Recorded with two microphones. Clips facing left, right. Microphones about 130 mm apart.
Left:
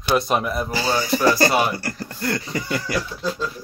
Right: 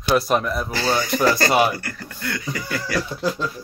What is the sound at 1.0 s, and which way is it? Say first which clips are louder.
Speech: left 2 dB; 15° left (ahead or behind).